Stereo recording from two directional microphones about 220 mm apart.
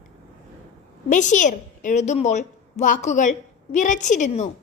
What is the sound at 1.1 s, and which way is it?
A woman's voice, 35° left (ahead or behind).